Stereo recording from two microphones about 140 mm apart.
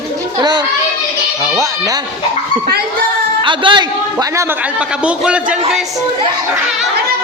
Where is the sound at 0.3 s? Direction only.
30° right (ahead or behind).